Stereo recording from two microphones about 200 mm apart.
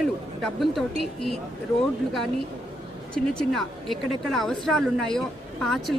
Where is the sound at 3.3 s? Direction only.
5° left (ahead or behind).